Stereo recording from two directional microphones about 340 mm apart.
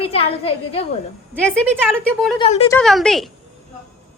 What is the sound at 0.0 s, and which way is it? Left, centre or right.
Speech, centre.